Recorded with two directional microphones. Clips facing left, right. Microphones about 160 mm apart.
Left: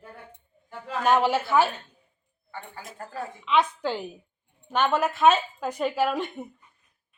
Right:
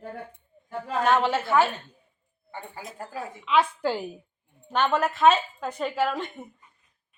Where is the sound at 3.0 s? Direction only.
10° right (ahead or behind).